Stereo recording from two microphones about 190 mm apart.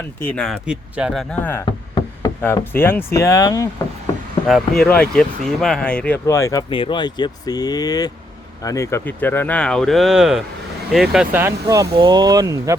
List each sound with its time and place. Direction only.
0.2 s speech: 5° left (ahead or behind)
2.0 s knock: 15° left (ahead or behind)
2.7 s speech: 10° left (ahead or behind)
4.4 s speech: centre (ahead or behind)
11.6 s speech: 20° right (ahead or behind)